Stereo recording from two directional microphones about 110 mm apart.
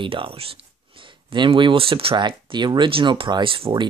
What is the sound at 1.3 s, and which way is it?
Speech, 45° right (ahead or behind).